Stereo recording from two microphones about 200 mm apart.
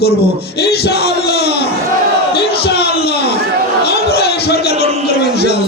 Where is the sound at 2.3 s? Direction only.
55° left (ahead or behind).